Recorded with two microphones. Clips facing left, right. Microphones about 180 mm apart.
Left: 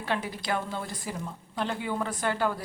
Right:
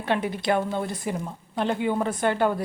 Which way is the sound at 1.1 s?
60° right (ahead or behind).